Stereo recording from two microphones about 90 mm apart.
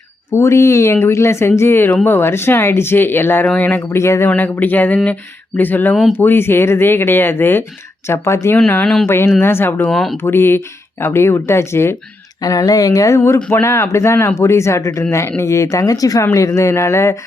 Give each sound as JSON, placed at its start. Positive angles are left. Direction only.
{"t": 0.3, "sound": "speech", "side_deg": 30}
{"t": 3.8, "sound": "speech", "side_deg": 30}
{"t": 4.5, "sound": "speech", "side_deg": 20}
{"t": 9.8, "sound": "speech", "side_deg": 5}
{"t": 10.2, "sound": "speech", "side_deg": 25}
{"t": 12.4, "sound": "speech", "side_deg": 45}